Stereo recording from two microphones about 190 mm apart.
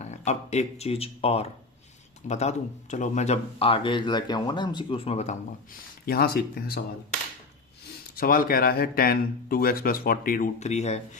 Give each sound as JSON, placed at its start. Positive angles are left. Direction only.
{"t": 0.0, "sound": "speech", "side_deg": 35}
{"t": 6.1, "sound": "speech", "side_deg": 55}
{"t": 8.1, "sound": "speech", "side_deg": 50}